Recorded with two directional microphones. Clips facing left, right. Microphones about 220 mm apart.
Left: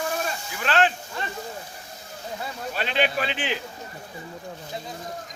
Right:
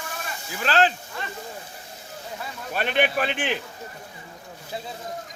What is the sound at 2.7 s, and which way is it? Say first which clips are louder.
Speech: right 2 dB; 55° right (ahead or behind).